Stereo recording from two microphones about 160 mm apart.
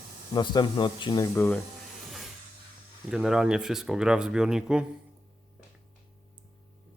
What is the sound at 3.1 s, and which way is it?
Speech, 5° right (ahead or behind).